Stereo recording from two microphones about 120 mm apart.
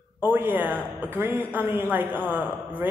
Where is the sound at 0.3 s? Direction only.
15° right (ahead or behind).